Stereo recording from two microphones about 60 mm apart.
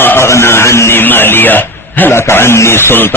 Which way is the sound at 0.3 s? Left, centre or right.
Left.